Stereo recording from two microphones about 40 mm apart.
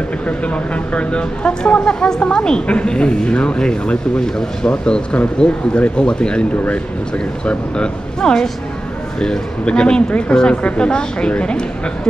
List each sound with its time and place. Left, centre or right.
0.4 s speech: left
2.6 s a woman's voice: left
7.4 s speech: left
9.7 s speech: left